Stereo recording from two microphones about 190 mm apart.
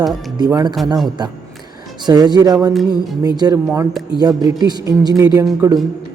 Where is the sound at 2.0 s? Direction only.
20° right (ahead or behind).